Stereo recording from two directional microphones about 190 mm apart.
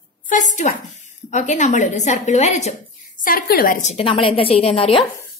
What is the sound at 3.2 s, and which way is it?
Speech, 50° left (ahead or behind).